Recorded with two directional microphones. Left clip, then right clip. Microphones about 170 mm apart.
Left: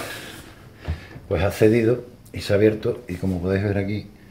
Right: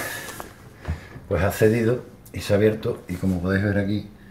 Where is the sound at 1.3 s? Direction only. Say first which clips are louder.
Left 1 dB; 20° left (ahead or behind).